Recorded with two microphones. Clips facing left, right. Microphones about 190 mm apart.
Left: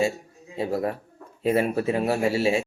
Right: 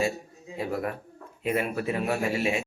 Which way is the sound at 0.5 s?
30° left (ahead or behind).